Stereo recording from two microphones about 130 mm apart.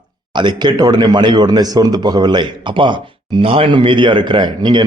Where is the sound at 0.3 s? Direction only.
35° right (ahead or behind).